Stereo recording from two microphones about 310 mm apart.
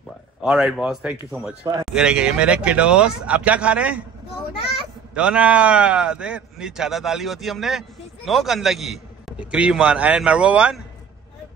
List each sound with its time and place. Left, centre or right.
0.4 s a man's voice: centre
1.5 s speech: centre
1.9 s a man's voice: centre
5.1 s a man's voice: centre